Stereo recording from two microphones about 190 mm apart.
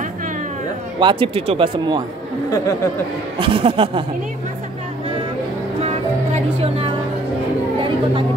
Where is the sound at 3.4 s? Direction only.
30° right (ahead or behind).